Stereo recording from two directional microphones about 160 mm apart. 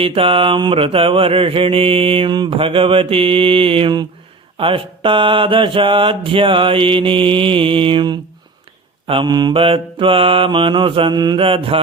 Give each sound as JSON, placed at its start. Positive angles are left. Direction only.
{"t": 0.0, "sound": "mantra", "side_deg": -35}